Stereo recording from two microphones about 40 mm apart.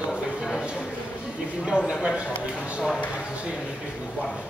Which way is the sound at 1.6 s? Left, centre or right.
Right.